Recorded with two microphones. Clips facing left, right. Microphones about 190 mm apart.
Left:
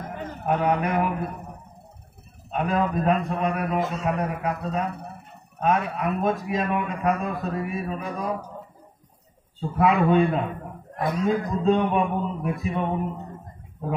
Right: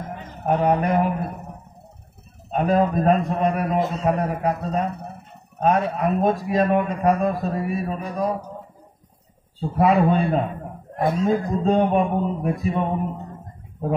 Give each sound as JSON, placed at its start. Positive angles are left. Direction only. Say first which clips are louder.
{"t": 0.5, "sound": "a man's voice", "louder": "right 4 dB", "side_deg": -40}
{"t": 2.5, "sound": "a man's voice", "louder": "right 5 dB", "side_deg": -35}
{"t": 9.6, "sound": "a man's voice", "louder": "right 3 dB", "side_deg": -35}